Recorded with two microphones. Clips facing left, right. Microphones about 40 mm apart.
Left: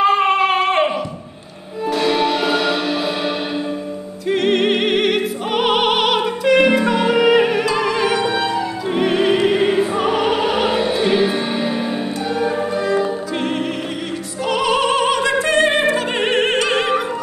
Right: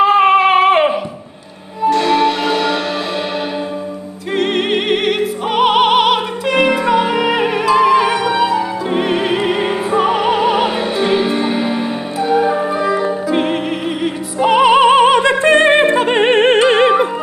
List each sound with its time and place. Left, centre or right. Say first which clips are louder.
0.0 s dog: right 5 dB; centre
1.9 s music: right 4 dB; centre
4.3 s music: even; centre
14.4 s opera: right 8 dB; right